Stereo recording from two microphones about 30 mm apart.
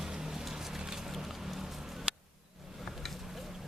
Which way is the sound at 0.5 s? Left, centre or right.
Centre.